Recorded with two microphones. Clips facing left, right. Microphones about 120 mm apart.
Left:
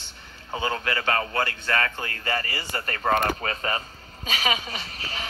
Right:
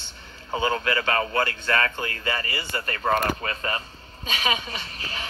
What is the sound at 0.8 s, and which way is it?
Speech, 35° left (ahead or behind).